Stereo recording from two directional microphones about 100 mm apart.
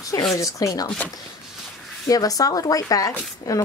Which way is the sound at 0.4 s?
35° left (ahead or behind).